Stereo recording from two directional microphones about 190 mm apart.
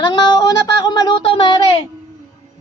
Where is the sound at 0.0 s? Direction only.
20° left (ahead or behind).